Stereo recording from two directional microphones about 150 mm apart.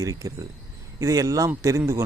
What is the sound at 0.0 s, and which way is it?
A man's voice, 20° right (ahead or behind).